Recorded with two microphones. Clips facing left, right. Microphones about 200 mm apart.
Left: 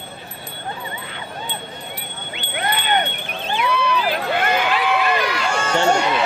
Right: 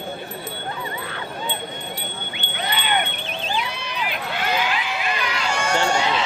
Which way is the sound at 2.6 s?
50° left (ahead or behind).